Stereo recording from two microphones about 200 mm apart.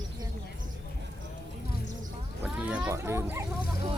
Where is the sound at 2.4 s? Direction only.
5° right (ahead or behind).